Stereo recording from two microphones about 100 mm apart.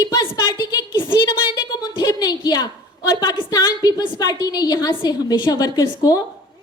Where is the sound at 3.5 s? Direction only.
40° left (ahead or behind).